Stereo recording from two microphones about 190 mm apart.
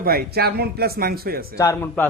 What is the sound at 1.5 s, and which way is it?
Speech, 15° left (ahead or behind).